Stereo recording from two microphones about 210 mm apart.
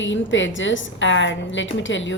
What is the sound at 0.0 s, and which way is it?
A woman's voice, 60° left (ahead or behind).